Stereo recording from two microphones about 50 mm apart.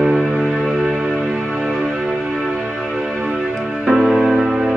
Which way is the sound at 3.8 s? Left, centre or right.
Centre.